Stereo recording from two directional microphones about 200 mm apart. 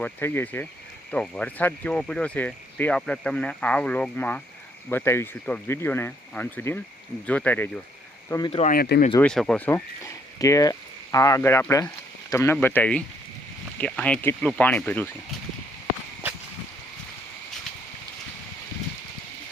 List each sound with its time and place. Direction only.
0.0 s speech: 10° left (ahead or behind)
8.3 s speech: 20° left (ahead or behind)
8.6 s speech: 50° left (ahead or behind)
9.2 s speech: 5° left (ahead or behind)